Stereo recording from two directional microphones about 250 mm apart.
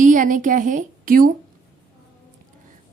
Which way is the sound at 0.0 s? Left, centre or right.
Right.